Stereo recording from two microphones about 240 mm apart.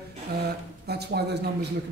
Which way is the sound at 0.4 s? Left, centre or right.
Right.